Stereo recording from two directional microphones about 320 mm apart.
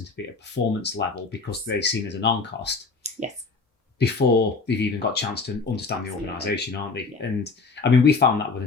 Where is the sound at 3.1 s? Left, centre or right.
Right.